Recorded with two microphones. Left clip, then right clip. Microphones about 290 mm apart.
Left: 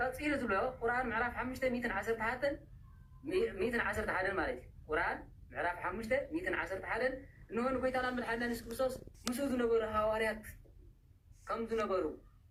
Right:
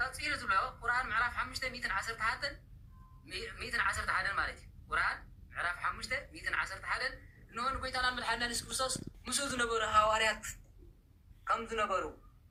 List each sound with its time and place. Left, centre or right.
0.0 s a woman's voice: centre